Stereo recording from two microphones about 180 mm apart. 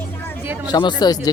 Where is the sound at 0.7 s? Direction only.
25° left (ahead or behind).